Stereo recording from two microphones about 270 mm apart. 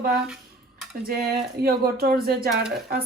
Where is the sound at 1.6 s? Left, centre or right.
Right.